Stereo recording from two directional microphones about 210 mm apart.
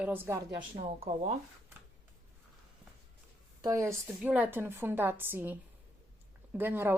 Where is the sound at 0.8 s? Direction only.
30° right (ahead or behind).